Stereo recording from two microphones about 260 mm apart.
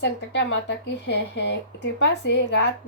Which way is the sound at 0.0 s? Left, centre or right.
Left.